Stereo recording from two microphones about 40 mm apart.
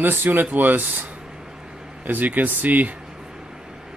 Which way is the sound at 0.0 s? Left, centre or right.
Right.